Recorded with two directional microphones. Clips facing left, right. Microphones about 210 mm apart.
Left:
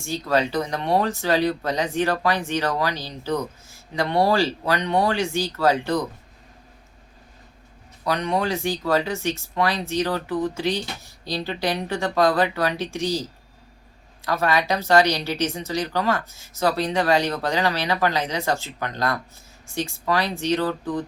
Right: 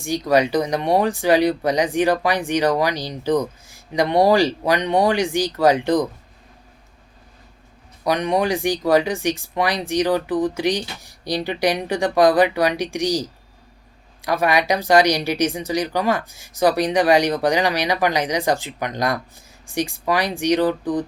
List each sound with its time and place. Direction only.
0.0 s speech: 15° right (ahead or behind)
8.0 s speech: 15° right (ahead or behind)